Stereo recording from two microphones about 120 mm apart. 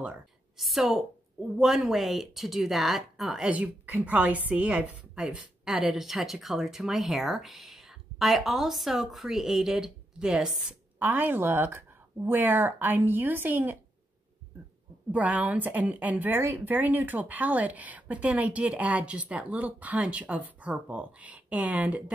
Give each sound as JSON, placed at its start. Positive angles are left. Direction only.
{"t": 0.6, "sound": "a woman's voice", "side_deg": 0}
{"t": 15.0, "sound": "a woman's voice", "side_deg": -10}